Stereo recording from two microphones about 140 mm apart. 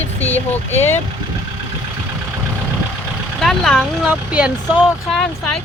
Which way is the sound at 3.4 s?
Centre (ahead or behind).